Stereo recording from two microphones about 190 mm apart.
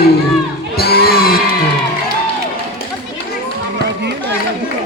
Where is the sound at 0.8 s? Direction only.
55° left (ahead or behind).